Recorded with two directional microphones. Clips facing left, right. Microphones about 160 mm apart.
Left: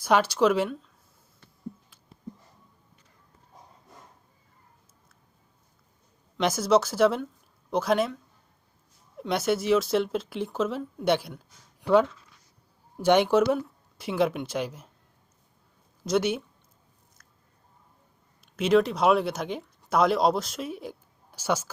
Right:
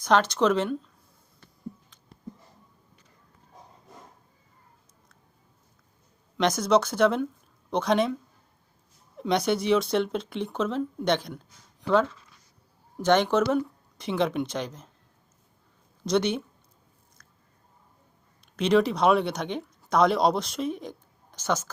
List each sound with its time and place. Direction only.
0.0 s speech: 10° left (ahead or behind)
6.3 s speech: 5° left (ahead or behind)
9.1 s speech: 5° left (ahead or behind)
16.0 s speech: 5° left (ahead or behind)
17.2 s biting: 5° left (ahead or behind)
18.5 s speech: 5° left (ahead or behind)